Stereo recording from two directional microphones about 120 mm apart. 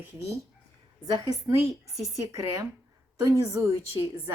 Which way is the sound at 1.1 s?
30° right (ahead or behind).